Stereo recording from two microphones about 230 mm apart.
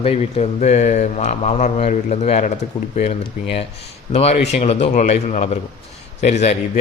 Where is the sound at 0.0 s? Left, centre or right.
Left.